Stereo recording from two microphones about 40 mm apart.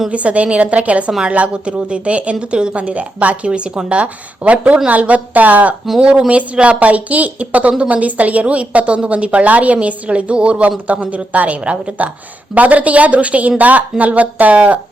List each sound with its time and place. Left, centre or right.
0.1 s a woman's voice: right
6.0 s a woman's voice: right